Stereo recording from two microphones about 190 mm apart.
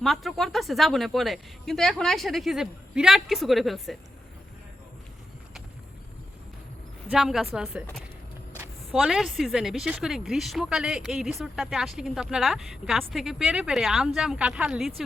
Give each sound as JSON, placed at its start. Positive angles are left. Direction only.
{"t": 0.0, "sound": "speech", "side_deg": 0}
{"t": 7.1, "sound": "speech", "side_deg": 0}
{"t": 8.9, "sound": "speech", "side_deg": 0}